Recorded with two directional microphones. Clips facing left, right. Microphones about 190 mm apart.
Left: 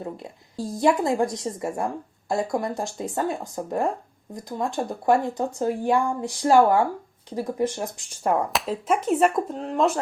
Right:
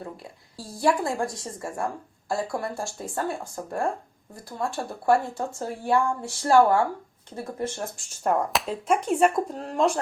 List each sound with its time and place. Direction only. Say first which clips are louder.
0.0 s a woman's voice: left 4 dB; 20° left (ahead or behind); by 10.0 s centre (ahead or behind)